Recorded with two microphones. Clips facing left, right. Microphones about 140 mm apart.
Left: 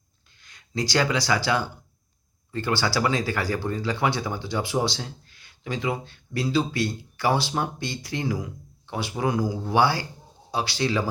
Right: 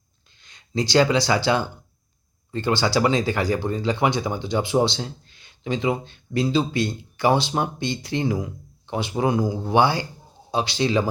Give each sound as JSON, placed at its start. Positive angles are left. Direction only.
{"t": 0.3, "sound": "speech", "side_deg": -25}